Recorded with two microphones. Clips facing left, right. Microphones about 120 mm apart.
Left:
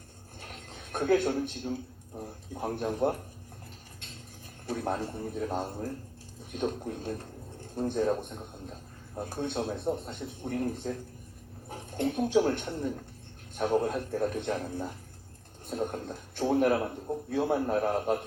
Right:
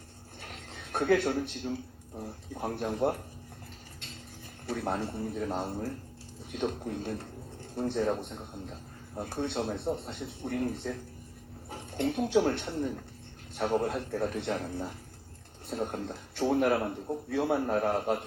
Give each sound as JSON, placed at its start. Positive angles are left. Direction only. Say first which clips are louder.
{"t": 0.4, "sound": "a sound", "louder": "even", "side_deg": 45}
{"t": 1.5, "sound": "a man's voice", "louder": "left 1 dB", "side_deg": 45}
{"t": 4.8, "sound": "a man's voice", "louder": "even", "side_deg": 50}